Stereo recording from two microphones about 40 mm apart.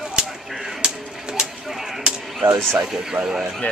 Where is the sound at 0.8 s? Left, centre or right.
Centre.